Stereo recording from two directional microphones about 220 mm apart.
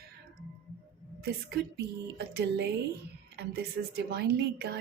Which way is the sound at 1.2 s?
45° right (ahead or behind).